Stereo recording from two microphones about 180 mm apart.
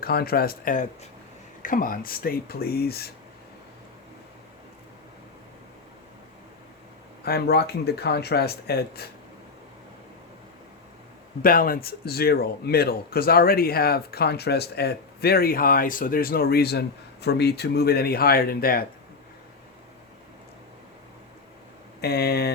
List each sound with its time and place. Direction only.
0.0 s speech: 60° left (ahead or behind)
7.3 s speech: 60° left (ahead or behind)
11.4 s speech: 50° left (ahead or behind)
22.0 s speech: 60° left (ahead or behind)